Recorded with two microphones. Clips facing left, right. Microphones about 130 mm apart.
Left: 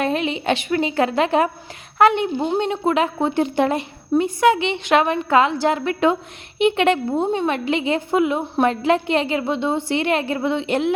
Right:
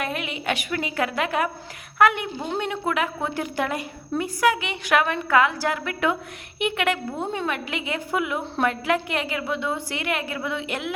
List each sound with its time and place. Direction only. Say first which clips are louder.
0.0 s a woman's voice: left 7 dB; 30° left (ahead or behind)